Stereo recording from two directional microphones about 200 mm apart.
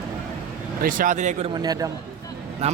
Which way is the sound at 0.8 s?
45° right (ahead or behind).